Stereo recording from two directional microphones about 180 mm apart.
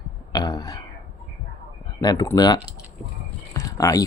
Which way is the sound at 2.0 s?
25° left (ahead or behind).